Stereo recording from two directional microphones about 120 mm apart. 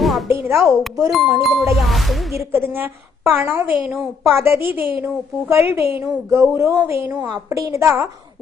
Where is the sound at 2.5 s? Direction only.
20° right (ahead or behind).